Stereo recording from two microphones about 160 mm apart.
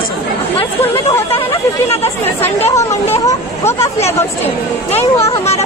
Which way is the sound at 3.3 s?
20° left (ahead or behind).